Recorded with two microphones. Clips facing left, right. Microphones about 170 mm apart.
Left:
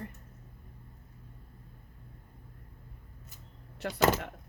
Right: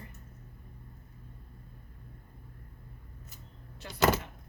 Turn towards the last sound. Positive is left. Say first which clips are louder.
# left 1 dB
turn(degrees=75)  # may be behind; listen again after turning